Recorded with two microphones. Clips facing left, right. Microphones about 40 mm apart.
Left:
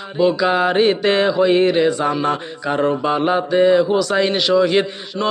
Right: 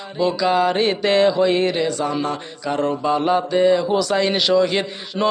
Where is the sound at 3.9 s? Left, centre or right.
Centre.